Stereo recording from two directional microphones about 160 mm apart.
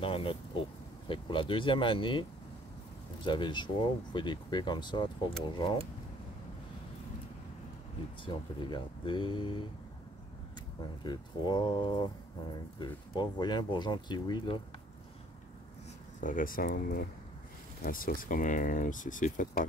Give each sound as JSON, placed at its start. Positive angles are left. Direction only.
{"t": 0.0, "sound": "vehicle", "side_deg": 35}
{"t": 1.0, "sound": "speech", "side_deg": 30}
{"t": 3.3, "sound": "speech", "side_deg": 30}
{"t": 8.3, "sound": "speech", "side_deg": 30}
{"t": 11.1, "sound": "speech", "side_deg": 25}
{"t": 16.2, "sound": "speech", "side_deg": 55}